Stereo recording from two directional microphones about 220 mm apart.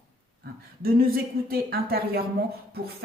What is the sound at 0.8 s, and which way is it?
A woman's voice, 45° right (ahead or behind).